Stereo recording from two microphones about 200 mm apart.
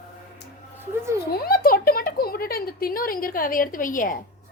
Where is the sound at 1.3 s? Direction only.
50° left (ahead or behind).